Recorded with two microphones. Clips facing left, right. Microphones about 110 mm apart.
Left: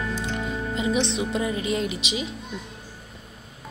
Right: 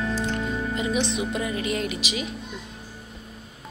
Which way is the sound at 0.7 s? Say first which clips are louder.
Left 3 dB; 25° left (ahead or behind).